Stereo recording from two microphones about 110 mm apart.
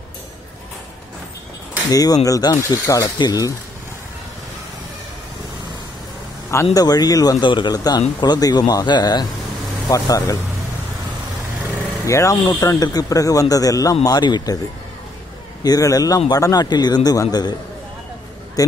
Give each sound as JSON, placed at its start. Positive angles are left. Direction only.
{"t": 1.9, "sound": "speech", "side_deg": 35}
{"t": 6.5, "sound": "speech", "side_deg": 30}
{"t": 12.1, "sound": "speech", "side_deg": 25}
{"t": 15.6, "sound": "speech", "side_deg": 35}